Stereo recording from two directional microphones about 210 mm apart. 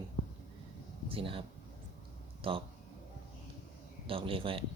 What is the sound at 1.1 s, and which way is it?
Speech, 25° right (ahead or behind).